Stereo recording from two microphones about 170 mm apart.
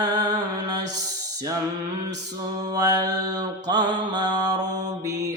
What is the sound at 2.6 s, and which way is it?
Mantra, 25° right (ahead or behind).